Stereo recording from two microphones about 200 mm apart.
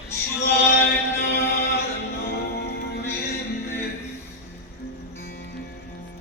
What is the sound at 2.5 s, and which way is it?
Music, 50° left (ahead or behind).